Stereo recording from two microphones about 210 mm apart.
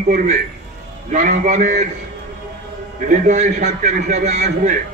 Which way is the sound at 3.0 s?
35° right (ahead or behind).